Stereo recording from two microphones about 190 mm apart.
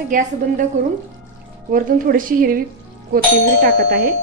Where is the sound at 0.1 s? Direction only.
40° right (ahead or behind).